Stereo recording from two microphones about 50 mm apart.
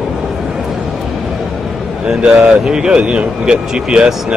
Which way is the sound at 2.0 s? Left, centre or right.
Centre.